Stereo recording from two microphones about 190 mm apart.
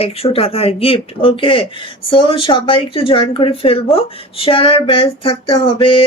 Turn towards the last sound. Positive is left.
turn(degrees=30)  # may be behind; listen again after turning